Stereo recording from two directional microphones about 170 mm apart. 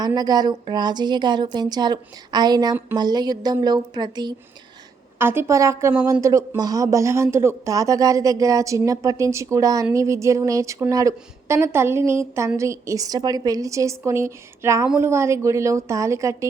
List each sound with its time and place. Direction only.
0.0 s speech: 25° right (ahead or behind)
5.2 s a woman's voice: 15° right (ahead or behind)